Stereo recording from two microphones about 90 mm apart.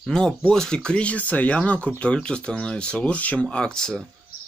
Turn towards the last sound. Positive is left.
turn(degrees=5)  # may be behind; listen again after turning